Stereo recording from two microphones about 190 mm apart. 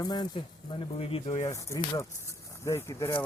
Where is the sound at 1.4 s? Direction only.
15° left (ahead or behind).